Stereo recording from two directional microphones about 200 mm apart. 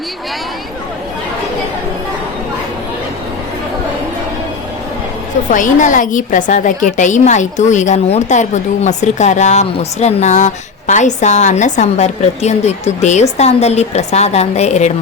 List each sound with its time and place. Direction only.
5.5 s a woman's voice: 40° left (ahead or behind)